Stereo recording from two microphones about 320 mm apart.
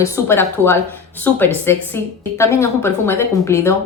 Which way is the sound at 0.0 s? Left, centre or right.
Centre.